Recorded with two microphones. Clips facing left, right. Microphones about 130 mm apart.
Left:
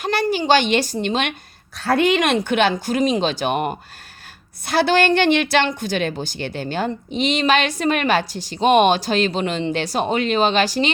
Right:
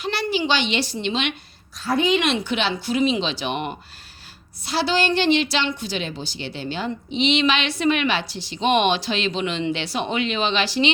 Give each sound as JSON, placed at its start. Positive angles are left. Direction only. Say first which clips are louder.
{"t": 0.0, "sound": "a woman's voice", "louder": "left 3 dB", "side_deg": 45}
{"t": 1.7, "sound": "a woman's voice", "louder": "left 4 dB", "side_deg": 65}
{"t": 2.1, "sound": "a woman's voice", "louder": "left 4 dB", "side_deg": 50}